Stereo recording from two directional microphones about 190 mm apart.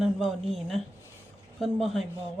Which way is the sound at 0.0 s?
Centre (ahead or behind).